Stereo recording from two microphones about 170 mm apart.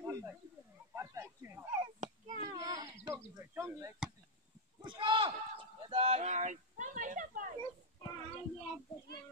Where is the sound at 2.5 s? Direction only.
25° right (ahead or behind).